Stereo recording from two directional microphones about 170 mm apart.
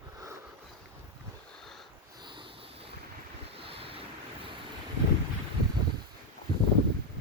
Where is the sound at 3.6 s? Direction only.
35° right (ahead or behind).